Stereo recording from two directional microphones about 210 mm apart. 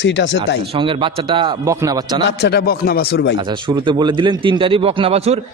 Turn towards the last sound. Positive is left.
turn(degrees=-30)  # may be behind; listen again after turning